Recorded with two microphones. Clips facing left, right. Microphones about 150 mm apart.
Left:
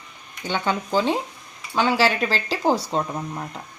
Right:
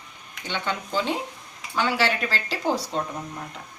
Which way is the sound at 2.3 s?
35° left (ahead or behind).